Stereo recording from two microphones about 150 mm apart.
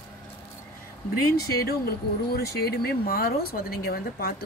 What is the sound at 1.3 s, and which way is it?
Speech, 90° left.